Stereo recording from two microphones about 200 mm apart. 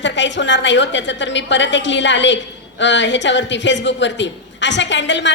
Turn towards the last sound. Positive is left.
turn(degrees=65)  # may be behind; listen again after turning